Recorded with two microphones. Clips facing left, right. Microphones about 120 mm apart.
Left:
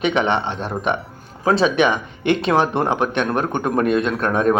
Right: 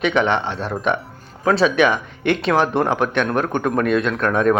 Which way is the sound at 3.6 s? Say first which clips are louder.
Left 1 dB; 25° left (ahead or behind).